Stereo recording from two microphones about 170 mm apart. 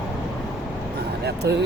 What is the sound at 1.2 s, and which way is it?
Speech, 75° right (ahead or behind).